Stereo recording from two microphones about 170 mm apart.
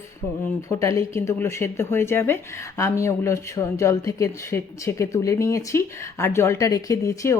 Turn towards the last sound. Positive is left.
turn(degrees=20)  # may be behind; listen again after turning